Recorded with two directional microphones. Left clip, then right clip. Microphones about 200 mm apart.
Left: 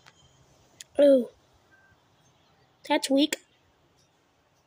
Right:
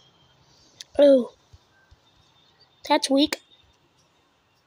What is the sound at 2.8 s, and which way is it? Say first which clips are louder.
Speech: right 4 dB; centre (ahead or behind).